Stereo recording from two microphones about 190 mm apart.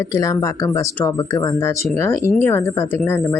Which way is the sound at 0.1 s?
15° left (ahead or behind).